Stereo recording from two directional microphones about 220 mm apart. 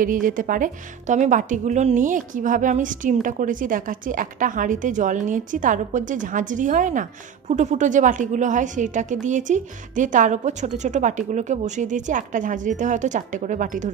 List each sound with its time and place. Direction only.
0.0 s speech: 40° right (ahead or behind)